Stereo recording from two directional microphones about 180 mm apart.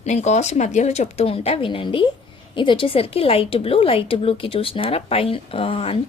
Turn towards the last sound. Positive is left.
turn(degrees=30)  # may be behind; listen again after turning